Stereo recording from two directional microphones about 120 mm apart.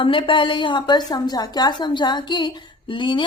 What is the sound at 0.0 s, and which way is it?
A woman's voice, 45° left (ahead or behind).